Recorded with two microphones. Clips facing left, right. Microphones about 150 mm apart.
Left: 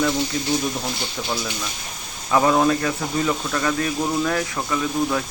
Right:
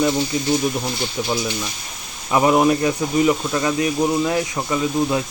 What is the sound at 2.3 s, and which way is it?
Speech, 15° right (ahead or behind).